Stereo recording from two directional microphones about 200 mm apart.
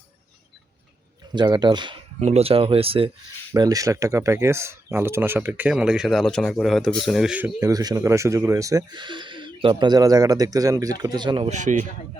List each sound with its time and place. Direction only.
1.3 s speech: 20° right (ahead or behind)
11.5 s a man's voice: 40° right (ahead or behind)